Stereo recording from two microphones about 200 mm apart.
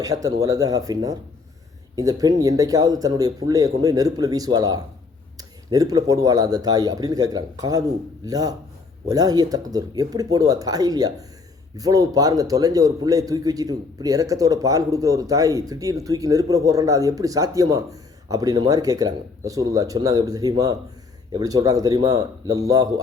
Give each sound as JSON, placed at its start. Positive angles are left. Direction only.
{"t": 0.0, "sound": "a man's voice", "side_deg": -15}